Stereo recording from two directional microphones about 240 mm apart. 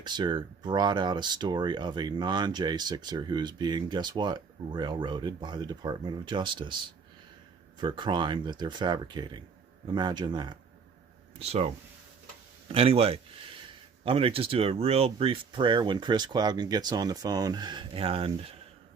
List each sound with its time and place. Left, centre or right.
0.0 s speech: centre
7.8 s speech: centre